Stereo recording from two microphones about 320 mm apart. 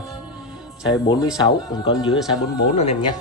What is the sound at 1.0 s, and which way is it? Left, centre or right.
Speech, centre.